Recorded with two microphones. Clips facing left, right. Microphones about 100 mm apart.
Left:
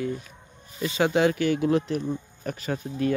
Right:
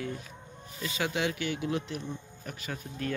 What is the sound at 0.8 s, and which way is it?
Speech, 35° left (ahead or behind).